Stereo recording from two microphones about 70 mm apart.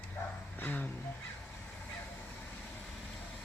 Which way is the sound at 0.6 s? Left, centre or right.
Left.